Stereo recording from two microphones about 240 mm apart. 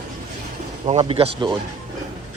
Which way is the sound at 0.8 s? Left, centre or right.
Right.